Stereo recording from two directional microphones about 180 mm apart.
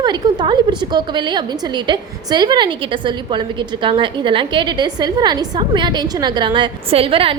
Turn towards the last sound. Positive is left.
turn(degrees=-30)  # may be behind; listen again after turning